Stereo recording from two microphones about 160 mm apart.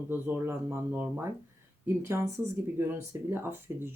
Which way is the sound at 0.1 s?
15° right (ahead or behind).